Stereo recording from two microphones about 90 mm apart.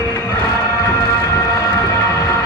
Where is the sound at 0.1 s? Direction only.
35° left (ahead or behind).